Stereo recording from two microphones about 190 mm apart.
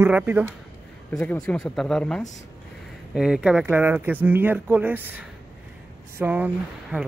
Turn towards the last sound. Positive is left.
turn(degrees=-10)  # may be behind; listen again after turning